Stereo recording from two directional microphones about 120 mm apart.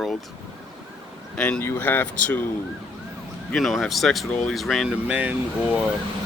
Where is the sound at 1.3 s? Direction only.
10° left (ahead or behind).